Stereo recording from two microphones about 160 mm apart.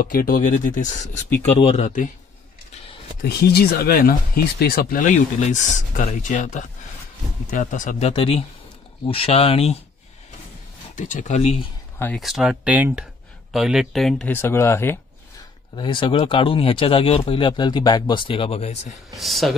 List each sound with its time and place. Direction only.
0.0 s speech: 60° left (ahead or behind)
3.2 s speech: 80° left; by 8.1 s 50° left (ahead or behind)
8.1 s speech: 35° left (ahead or behind)
11.0 s speech: 50° left (ahead or behind)
12.2 s speech: centre (ahead or behind); by 15.0 s 15° left (ahead or behind)
15.7 s speech: 30° left (ahead or behind)
19.1 s speech: centre (ahead or behind)